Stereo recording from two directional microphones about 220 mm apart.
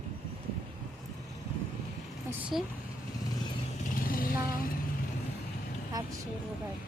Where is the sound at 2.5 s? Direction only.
Centre (ahead or behind).